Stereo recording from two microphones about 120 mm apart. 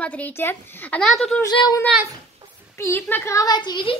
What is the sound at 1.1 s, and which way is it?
Speech, centre (ahead or behind).